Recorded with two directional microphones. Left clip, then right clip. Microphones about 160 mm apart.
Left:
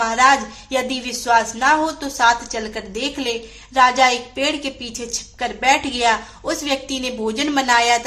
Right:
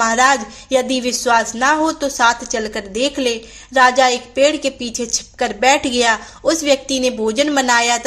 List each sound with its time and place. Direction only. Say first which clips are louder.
0.0 s a woman's voice: right 1 dB; 25° right (ahead or behind)